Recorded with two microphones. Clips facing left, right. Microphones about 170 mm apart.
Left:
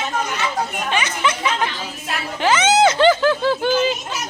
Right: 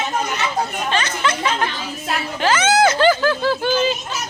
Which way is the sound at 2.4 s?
20° left (ahead or behind).